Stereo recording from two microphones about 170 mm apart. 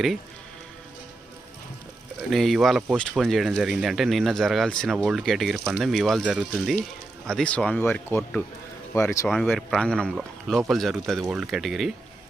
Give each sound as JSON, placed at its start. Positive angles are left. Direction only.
{"t": 2.3, "sound": "speech", "side_deg": 0}
{"t": 9.3, "sound": "speech", "side_deg": 5}